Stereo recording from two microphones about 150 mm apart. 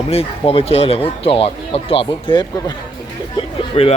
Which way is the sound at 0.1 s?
40° left (ahead or behind).